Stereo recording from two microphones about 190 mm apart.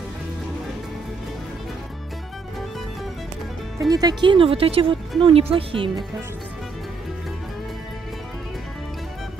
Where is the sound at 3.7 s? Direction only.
20° right (ahead or behind).